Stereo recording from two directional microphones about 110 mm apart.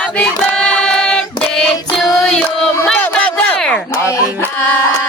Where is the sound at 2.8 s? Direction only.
10° left (ahead or behind).